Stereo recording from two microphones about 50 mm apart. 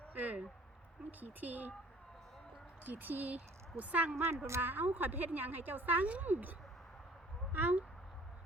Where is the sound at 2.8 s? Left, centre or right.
Right.